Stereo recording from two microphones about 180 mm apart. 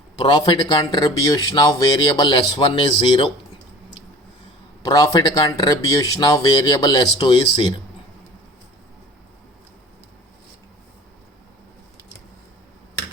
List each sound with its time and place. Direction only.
0.2 s speech: 30° left (ahead or behind)
4.8 s speech: 20° left (ahead or behind)